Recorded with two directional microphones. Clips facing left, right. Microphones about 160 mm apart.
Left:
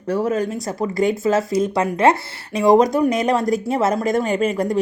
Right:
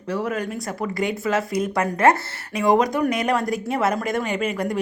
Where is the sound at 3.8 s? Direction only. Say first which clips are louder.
Left 4 dB; 25° left (ahead or behind).